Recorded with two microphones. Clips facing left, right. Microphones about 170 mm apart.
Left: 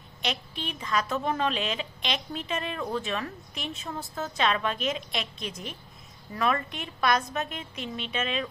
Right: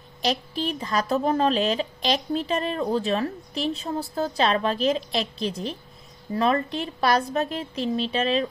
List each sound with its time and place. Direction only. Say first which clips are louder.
0.2 s speech: right 8 dB; 35° right (ahead or behind)